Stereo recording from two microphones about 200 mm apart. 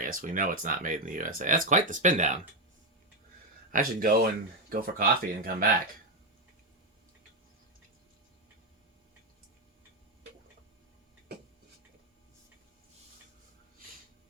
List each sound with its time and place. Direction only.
0.0 s speech: 40° right (ahead or behind)
3.7 s speech: 45° right (ahead or behind)